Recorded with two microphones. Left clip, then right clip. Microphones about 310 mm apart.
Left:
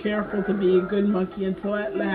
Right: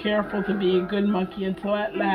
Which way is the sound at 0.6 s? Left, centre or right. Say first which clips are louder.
Left 2 dB; right.